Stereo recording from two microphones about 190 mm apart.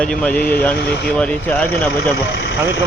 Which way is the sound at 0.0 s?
5° left (ahead or behind).